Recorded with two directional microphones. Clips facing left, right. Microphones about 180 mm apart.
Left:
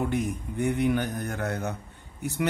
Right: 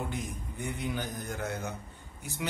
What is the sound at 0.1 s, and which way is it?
A man's voice, 65° left (ahead or behind).